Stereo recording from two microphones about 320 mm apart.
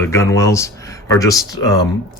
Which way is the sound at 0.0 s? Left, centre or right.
Centre.